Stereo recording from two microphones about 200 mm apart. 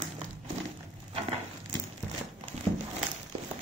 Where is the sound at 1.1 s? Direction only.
30° right (ahead or behind).